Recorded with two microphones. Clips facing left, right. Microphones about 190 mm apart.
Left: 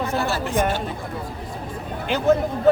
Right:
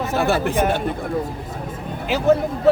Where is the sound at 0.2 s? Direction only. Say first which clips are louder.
Right 7 dB; 60° right (ahead or behind).